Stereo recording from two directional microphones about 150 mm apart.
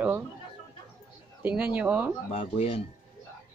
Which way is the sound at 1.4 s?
10° right (ahead or behind).